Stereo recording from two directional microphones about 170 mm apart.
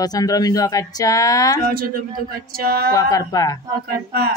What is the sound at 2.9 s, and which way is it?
Speech, 20° left (ahead or behind).